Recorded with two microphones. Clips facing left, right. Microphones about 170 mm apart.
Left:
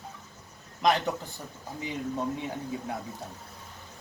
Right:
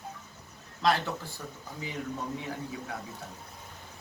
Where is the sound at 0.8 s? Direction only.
15° left (ahead or behind).